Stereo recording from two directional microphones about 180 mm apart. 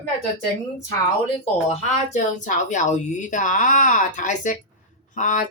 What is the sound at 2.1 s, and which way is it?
Speech, 45° left (ahead or behind).